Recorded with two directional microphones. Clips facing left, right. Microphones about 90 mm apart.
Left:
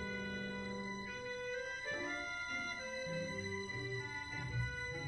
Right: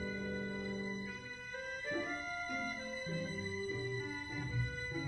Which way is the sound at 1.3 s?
Centre (ahead or behind).